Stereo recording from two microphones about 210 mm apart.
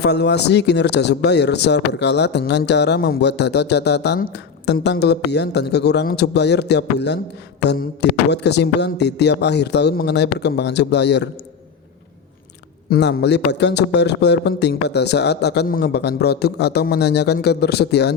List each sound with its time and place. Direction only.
0.0 s speech: 55° left (ahead or behind)
12.9 s speech: 55° left (ahead or behind)